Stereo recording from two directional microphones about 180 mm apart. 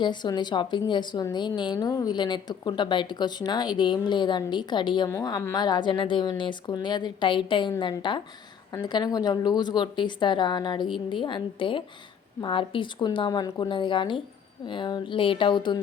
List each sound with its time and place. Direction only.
0.0 s a woman's voice: 25° left (ahead or behind)